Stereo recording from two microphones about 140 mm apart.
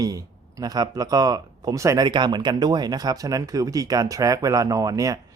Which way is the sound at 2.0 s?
30° right (ahead or behind).